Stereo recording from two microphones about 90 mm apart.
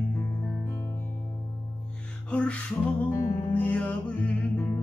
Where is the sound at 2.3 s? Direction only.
10° left (ahead or behind).